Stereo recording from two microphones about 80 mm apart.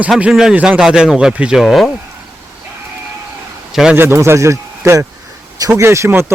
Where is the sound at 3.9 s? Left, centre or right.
Right.